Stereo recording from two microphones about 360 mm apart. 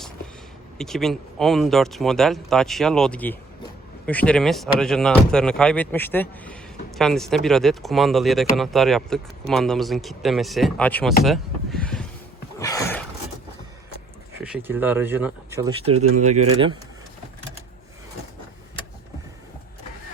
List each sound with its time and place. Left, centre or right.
0.8 s speech: centre
12.5 s a sound: centre
14.4 s speech: centre